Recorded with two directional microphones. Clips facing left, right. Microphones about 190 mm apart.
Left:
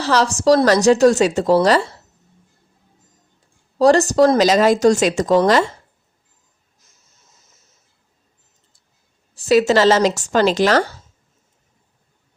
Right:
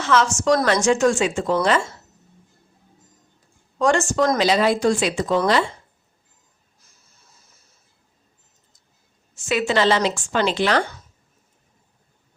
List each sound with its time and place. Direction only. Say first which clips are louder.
0.0 s speech: left 3 dB; 35° left (ahead or behind)
3.8 s speech: left 6 dB; 35° left (ahead or behind)
6.8 s a sound: even; 20° left (ahead or behind)
9.3 s speech: left 7 dB; 35° left (ahead or behind)